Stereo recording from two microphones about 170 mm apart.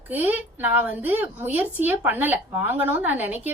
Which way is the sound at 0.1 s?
10° right (ahead or behind).